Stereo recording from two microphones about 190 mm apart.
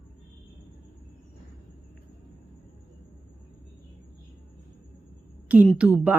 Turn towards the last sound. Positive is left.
turn(degrees=-5)  # may be behind; listen again after turning